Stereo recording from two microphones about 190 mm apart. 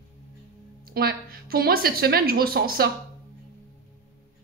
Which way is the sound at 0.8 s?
50° right (ahead or behind).